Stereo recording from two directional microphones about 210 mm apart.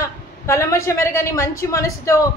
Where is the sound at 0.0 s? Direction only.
15° left (ahead or behind).